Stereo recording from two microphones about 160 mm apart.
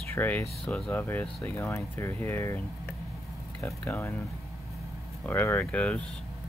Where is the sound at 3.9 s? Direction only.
10° left (ahead or behind).